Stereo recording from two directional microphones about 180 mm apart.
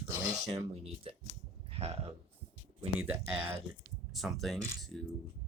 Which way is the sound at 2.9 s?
10° right (ahead or behind).